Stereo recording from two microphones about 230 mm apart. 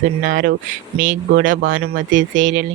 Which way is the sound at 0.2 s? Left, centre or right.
Right.